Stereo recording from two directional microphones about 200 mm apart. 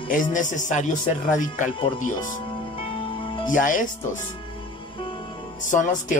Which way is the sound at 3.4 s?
40° left (ahead or behind).